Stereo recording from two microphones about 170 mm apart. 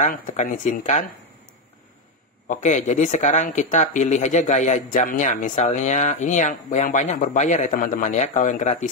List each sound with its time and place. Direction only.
0.0 s speech: 45° left (ahead or behind)
2.4 s speech: 45° left (ahead or behind)